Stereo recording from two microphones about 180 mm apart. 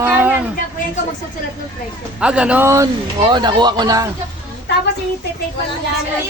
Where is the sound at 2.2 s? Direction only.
5° right (ahead or behind).